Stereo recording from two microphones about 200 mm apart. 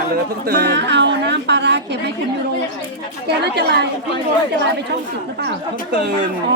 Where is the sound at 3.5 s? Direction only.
55° right (ahead or behind).